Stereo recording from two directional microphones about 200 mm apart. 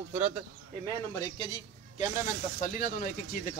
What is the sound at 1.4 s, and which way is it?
Speech, 25° left (ahead or behind).